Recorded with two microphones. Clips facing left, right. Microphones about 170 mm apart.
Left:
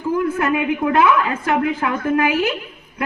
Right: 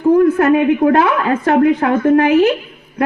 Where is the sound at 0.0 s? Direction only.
35° right (ahead or behind).